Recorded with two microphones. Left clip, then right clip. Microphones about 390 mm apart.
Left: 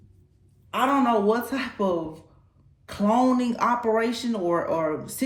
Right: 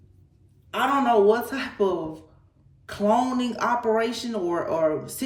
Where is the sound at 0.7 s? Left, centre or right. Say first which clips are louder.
Right 1 dB; centre.